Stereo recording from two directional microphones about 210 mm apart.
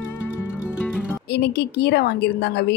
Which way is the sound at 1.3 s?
50° left (ahead or behind).